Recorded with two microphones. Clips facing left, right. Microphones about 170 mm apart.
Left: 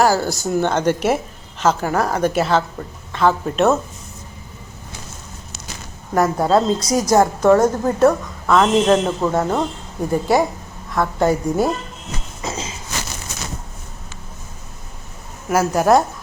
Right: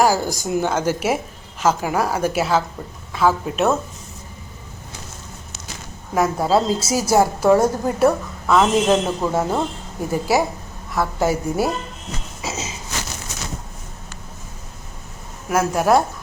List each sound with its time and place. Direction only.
0.0 s a woman's voice: 10° right (ahead or behind)
6.1 s a woman's voice: centre (ahead or behind)
12.4 s a sound: 5° right (ahead or behind)
15.4 s a woman's voice: centre (ahead or behind)